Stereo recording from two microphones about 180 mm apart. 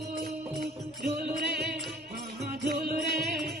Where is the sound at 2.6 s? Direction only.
55° right (ahead or behind).